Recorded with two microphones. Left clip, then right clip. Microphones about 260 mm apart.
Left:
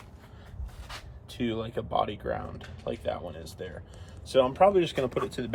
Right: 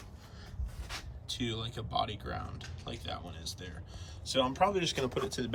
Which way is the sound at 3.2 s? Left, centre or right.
Right.